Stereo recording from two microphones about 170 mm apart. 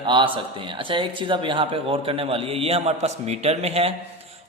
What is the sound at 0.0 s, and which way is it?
Speech, 30° right (ahead or behind).